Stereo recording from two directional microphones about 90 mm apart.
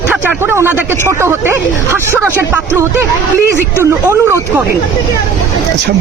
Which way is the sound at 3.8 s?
30° right (ahead or behind).